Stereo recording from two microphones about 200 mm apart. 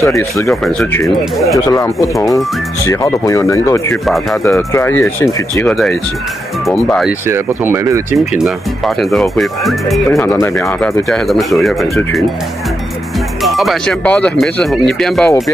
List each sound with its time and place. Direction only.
0.0 s speech: 15° left (ahead or behind)
0.7 s speech: centre (ahead or behind)
1.7 s speech: 15° left (ahead or behind)
3.9 s speech: centre (ahead or behind)
4.5 s speech: 15° left (ahead or behind)
6.7 s speech: centre (ahead or behind)
7.2 s speech: 10° right (ahead or behind)
8.5 s speech: centre (ahead or behind)
10.2 s speech: 15° left (ahead or behind)
11.1 s speech: centre (ahead or behind)
13.4 s speech: centre (ahead or behind)